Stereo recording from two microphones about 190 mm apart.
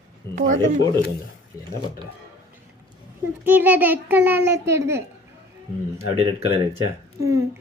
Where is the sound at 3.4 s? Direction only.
10° right (ahead or behind).